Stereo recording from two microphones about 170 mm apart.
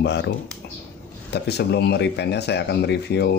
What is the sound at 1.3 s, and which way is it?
Speech, 80° left.